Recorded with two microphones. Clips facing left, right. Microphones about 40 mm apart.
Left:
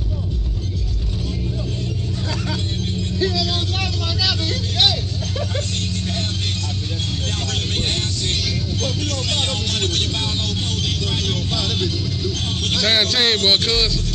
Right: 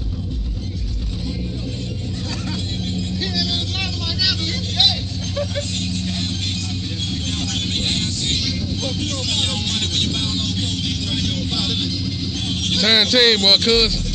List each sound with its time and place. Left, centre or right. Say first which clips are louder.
9.7 s vehicle: even; right
12.7 s speech: right 3 dB; centre